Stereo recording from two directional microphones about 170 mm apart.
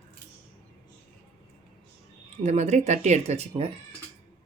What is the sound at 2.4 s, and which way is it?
Speech, 40° right (ahead or behind).